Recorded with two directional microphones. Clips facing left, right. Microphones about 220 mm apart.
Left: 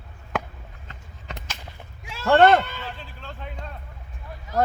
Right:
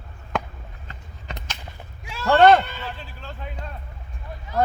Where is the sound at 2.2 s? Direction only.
55° left (ahead or behind).